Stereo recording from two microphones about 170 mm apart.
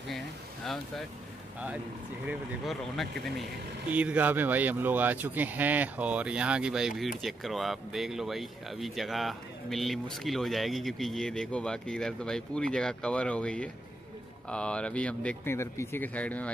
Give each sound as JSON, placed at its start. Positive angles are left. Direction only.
{"t": 2.2, "sound": "speech", "side_deg": 0}